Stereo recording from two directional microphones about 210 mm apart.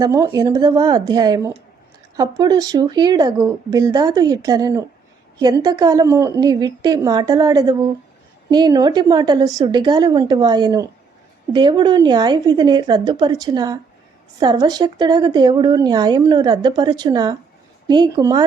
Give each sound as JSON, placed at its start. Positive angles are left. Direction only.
{"t": 0.0, "sound": "a woman's voice", "side_deg": -15}